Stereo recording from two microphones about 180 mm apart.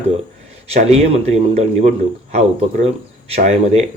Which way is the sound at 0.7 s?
35° right (ahead or behind).